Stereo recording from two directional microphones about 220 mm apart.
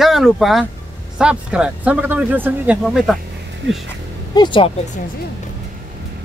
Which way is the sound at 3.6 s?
55° right (ahead or behind).